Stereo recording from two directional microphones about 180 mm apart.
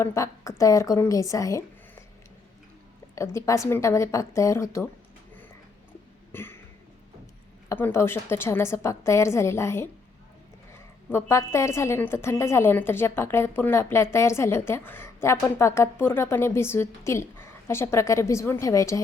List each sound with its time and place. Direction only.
0.0 s a woman's voice: 15° left (ahead or behind)
3.2 s a woman's voice: 15° left (ahead or behind)
6.3 s a sound: 10° left (ahead or behind)
7.7 s a woman's voice: 10° left (ahead or behind)